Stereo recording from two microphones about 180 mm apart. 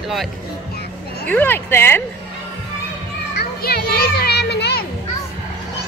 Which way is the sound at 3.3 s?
60° left (ahead or behind).